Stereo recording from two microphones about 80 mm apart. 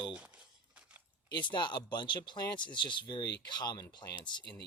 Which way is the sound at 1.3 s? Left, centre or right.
Left.